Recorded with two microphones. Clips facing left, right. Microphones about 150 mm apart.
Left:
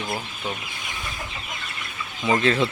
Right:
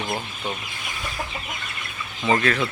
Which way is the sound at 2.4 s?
25° left (ahead or behind).